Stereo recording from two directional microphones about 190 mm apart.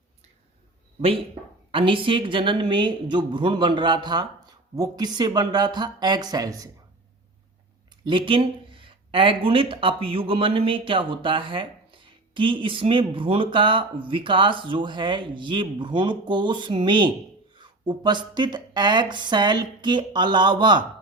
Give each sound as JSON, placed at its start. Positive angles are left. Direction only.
{"t": 1.7, "sound": "speech", "side_deg": -25}
{"t": 8.0, "sound": "speech", "side_deg": -25}